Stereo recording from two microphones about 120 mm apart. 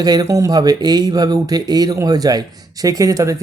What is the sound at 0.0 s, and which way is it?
Speech, 35° right (ahead or behind).